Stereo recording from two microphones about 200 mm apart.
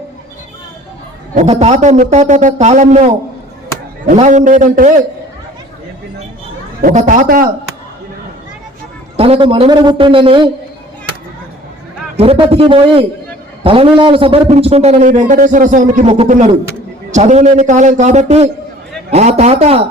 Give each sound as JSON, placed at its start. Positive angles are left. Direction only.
{"t": 1.4, "sound": "a man's voice", "side_deg": -35}
{"t": 6.8, "sound": "a man's voice", "side_deg": -40}
{"t": 9.1, "sound": "a man's voice", "side_deg": -30}
{"t": 12.1, "sound": "a man's voice", "side_deg": -30}